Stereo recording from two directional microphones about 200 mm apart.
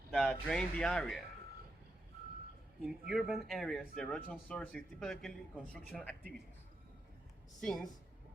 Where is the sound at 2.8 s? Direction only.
Centre (ahead or behind).